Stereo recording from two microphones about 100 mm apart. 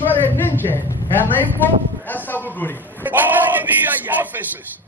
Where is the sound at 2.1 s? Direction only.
20° left (ahead or behind).